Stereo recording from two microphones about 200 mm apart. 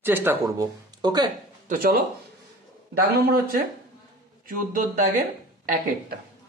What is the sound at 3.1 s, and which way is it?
Speech, 50° right (ahead or behind).